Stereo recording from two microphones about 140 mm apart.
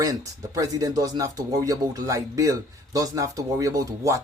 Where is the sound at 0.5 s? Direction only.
25° right (ahead or behind).